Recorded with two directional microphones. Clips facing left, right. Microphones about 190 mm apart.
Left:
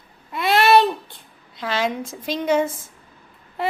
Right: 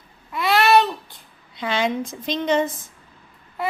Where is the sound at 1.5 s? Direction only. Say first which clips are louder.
Right 1 dB; centre (ahead or behind).